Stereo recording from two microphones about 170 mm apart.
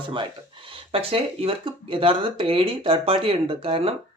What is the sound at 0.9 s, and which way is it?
Speech, 35° right (ahead or behind).